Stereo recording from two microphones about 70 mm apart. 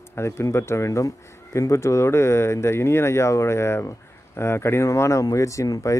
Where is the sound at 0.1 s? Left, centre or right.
Left.